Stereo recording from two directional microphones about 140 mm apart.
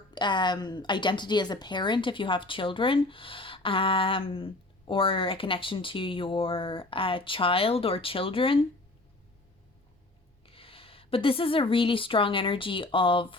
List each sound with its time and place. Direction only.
0.1 s a woman's voice: 30° left (ahead or behind)
10.4 s a woman's voice: 40° left (ahead or behind)